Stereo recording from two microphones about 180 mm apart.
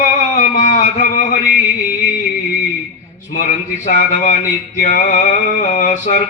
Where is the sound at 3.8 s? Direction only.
45° left (ahead or behind).